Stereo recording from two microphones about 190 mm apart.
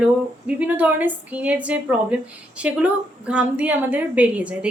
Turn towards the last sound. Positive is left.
turn(degrees=-5)  # may be behind; listen again after turning